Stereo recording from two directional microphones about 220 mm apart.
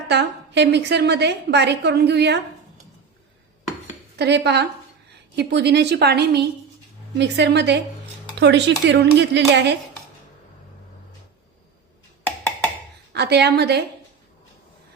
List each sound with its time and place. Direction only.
0.1 s a woman's voice: 50° right (ahead or behind)
4.2 s a woman's voice: 50° right (ahead or behind)
12.2 s wood block: 5° left (ahead or behind)
13.1 s a woman's voice: 50° right (ahead or behind)